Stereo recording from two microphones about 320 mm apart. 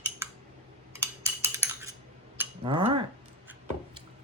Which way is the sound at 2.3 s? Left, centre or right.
Centre.